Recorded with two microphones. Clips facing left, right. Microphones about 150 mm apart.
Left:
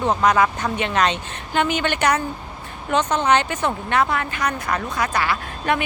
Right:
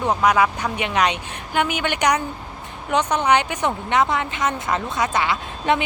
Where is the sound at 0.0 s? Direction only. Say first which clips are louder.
Even; 10° right (ahead or behind).